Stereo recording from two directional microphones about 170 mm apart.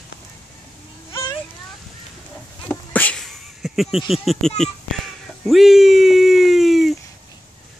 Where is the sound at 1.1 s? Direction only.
25° left (ahead or behind).